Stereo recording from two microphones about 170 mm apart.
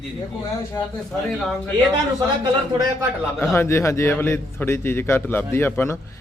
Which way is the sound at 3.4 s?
15° left (ahead or behind).